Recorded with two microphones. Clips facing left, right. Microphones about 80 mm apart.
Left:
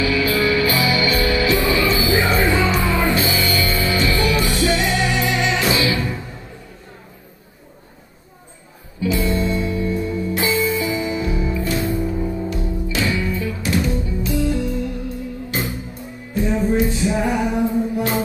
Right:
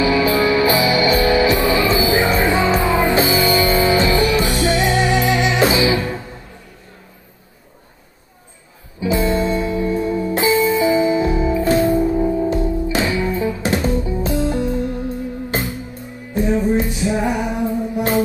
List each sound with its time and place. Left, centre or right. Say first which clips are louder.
0.0 s music: right 3 dB; right
9.0 s music: right 3 dB; right
16.9 s music: even; right